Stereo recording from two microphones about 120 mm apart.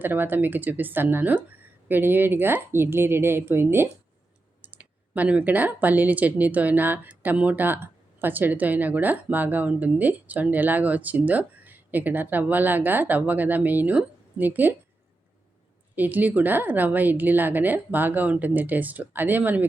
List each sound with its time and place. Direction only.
0.0 s speech: 15° right (ahead or behind)
16.0 s speech: 15° right (ahead or behind)